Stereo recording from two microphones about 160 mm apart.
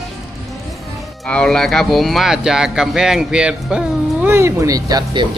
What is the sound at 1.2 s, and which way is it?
Speech, 5° left (ahead or behind).